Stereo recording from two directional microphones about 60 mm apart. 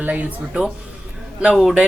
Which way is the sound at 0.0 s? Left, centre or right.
Right.